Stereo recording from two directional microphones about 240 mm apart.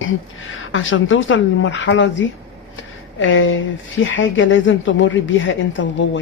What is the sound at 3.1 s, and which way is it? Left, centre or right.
Speech, left.